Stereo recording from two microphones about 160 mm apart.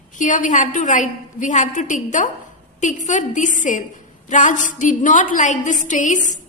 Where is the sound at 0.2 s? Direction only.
55° left (ahead or behind).